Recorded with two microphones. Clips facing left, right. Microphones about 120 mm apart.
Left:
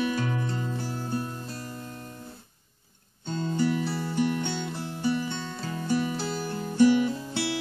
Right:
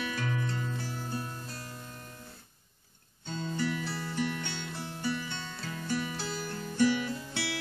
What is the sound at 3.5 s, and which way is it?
Music, 30° left (ahead or behind).